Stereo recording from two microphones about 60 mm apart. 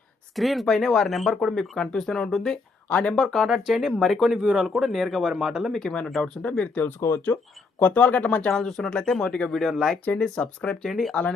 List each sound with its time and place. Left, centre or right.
0.3 s speech: centre
1.8 s speech: centre
2.0 s speech: centre
2.9 s speech: centre
3.2 s speech: centre
4.3 s speech: centre
4.5 s speech: centre
5.7 s speech: centre
7.0 s speech: left
7.8 s speech: left
8.5 s speech: centre
9.6 s speech: centre
10.2 s speech: centre
10.8 s speech: centre